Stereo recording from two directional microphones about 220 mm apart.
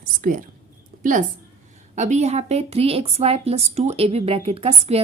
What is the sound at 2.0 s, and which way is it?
A woman's voice, 30° right (ahead or behind).